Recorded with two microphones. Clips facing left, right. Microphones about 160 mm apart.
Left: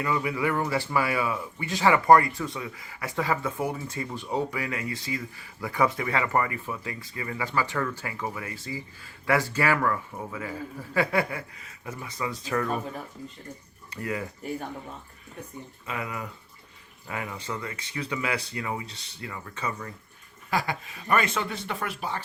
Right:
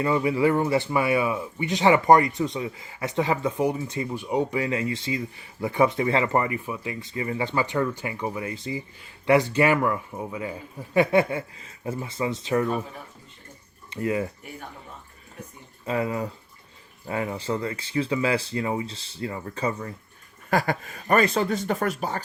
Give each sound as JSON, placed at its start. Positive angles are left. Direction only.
{"t": 0.0, "sound": "speech", "side_deg": -30}
{"t": 13.9, "sound": "speech", "side_deg": -25}
{"t": 15.9, "sound": "speech", "side_deg": -30}
{"t": 20.5, "sound": "speech", "side_deg": -50}